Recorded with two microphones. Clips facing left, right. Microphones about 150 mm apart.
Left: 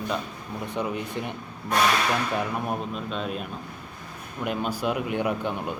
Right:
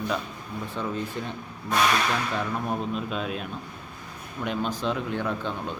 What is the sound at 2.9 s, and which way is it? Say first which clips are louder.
A man's voice: right 1 dB; centre (ahead or behind).